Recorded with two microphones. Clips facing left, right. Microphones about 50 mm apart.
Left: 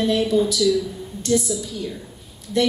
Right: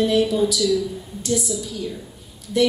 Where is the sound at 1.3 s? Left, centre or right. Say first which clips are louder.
Left 3 dB; left.